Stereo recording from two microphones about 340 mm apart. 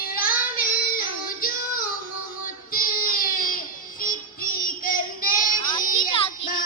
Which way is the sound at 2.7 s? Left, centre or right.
Left.